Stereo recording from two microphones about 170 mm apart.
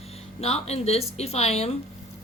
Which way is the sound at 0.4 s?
40° left (ahead or behind).